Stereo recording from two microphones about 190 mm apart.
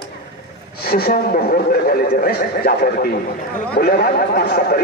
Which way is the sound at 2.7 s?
50° left (ahead or behind).